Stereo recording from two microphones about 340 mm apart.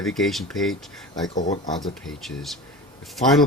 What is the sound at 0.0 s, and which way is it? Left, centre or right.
Speech, centre.